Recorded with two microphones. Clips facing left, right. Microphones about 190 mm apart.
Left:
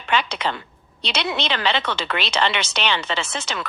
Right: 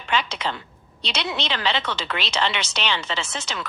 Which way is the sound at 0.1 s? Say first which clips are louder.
Left 2 dB; 60° left (ahead or behind).